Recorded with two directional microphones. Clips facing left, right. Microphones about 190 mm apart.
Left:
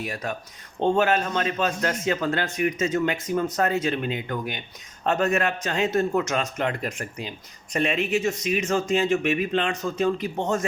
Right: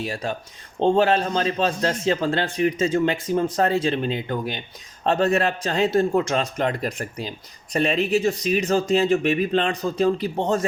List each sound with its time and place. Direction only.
0.0 s a man's voice: 30° right (ahead or behind)